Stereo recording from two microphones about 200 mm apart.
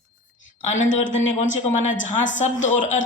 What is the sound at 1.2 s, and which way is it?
Speech, 40° left (ahead or behind).